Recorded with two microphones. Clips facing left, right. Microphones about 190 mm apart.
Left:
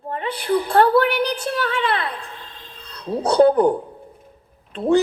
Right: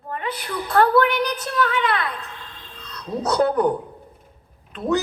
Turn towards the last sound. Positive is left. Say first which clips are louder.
# left 4 dB
turn(degrees=30)  # may be behind; listen again after turning